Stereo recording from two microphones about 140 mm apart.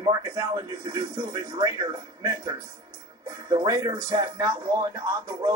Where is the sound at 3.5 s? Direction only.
30° right (ahead or behind).